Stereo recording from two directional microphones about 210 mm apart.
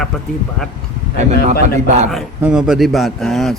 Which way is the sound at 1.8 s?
35° right (ahead or behind).